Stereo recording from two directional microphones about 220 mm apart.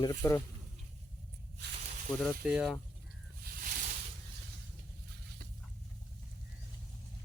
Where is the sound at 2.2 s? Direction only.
5° right (ahead or behind).